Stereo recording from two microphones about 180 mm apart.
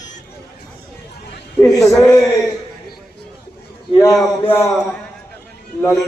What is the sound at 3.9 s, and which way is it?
Speech, 20° left (ahead or behind).